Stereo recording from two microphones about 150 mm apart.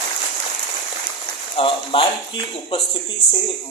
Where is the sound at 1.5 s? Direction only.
35° left (ahead or behind).